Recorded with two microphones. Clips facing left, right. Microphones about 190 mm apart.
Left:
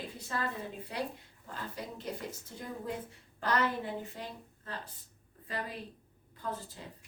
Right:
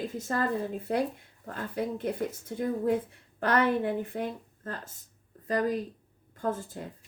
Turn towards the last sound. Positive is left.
turn(degrees=-50)  # may be behind; listen again after turning